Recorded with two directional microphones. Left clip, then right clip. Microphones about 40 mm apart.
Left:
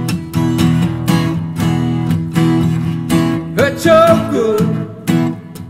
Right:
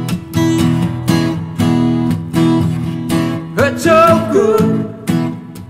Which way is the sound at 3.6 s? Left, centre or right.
Right.